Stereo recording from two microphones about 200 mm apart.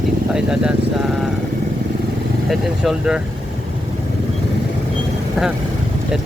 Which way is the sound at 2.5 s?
5° right (ahead or behind).